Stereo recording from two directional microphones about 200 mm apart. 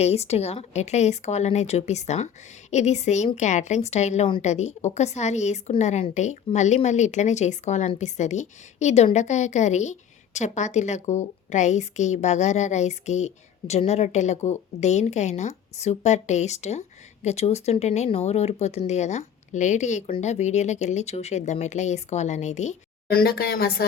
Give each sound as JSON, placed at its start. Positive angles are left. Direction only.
{"t": 0.0, "sound": "speech", "side_deg": 30}